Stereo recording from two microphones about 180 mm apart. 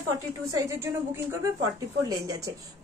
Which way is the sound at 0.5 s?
15° right (ahead or behind).